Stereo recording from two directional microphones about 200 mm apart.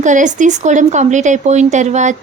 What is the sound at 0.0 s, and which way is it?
Speech, 40° right (ahead or behind).